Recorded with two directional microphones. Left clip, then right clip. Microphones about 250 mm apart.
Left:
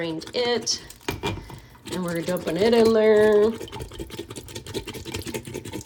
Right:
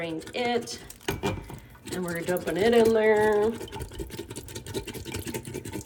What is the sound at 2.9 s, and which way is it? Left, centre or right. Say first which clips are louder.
Speech: left 4 dB; centre.